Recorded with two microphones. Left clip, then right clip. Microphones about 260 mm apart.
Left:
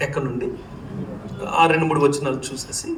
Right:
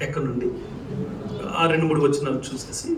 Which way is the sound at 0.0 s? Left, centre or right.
Centre.